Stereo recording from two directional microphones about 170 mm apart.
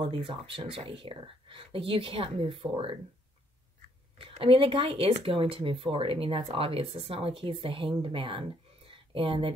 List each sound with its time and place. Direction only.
0.0 s speech: 30° right (ahead or behind)
4.2 s speech: 30° right (ahead or behind)